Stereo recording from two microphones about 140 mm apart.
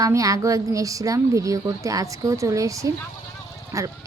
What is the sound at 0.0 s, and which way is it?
A woman's voice, 25° right (ahead or behind).